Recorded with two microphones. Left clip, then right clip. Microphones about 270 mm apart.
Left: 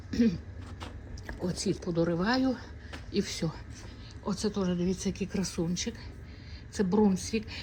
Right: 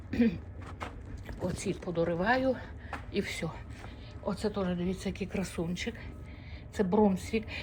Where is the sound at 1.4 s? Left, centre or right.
Centre.